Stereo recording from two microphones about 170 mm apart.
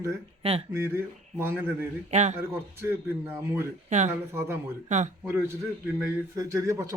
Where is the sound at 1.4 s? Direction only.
15° right (ahead or behind).